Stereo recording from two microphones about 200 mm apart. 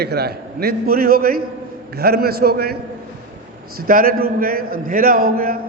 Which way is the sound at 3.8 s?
45° right (ahead or behind).